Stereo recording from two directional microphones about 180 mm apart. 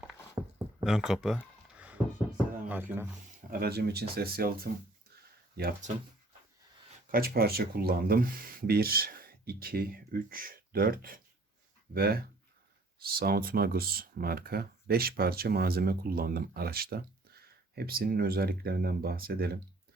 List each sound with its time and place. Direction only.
0.4 s a sound: 15° right (ahead or behind)
0.9 s speech: 5° right (ahead or behind)
2.6 s speech: 10° right (ahead or behind)
3.5 s speech: 60° right (ahead or behind)
7.1 s speech: 55° right (ahead or behind)